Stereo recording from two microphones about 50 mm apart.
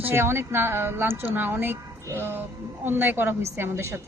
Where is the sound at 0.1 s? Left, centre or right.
Right.